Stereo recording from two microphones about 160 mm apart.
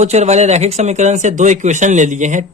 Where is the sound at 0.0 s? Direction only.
45° right (ahead or behind).